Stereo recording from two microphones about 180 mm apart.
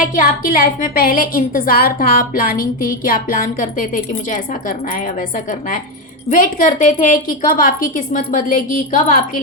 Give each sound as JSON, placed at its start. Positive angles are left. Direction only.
{"t": 0.0, "sound": "a woman's voice", "side_deg": 50}
{"t": 5.5, "sound": "a woman's voice", "side_deg": 50}